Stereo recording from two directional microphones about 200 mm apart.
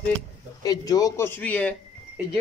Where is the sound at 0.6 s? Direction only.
20° left (ahead or behind).